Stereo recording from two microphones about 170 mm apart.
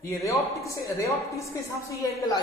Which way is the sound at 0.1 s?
20° left (ahead or behind).